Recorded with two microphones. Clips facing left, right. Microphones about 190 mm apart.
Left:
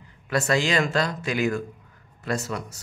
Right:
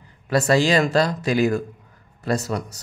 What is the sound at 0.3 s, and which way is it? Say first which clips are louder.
Speech: right 5 dB; 35° right (ahead or behind).